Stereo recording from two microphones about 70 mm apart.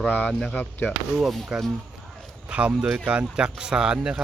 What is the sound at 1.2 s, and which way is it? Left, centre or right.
Speech, centre.